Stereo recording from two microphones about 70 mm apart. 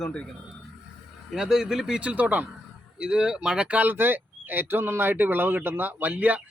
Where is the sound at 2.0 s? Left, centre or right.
Right.